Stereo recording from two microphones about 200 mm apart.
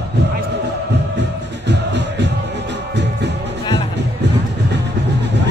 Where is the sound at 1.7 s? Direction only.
60° right (ahead or behind).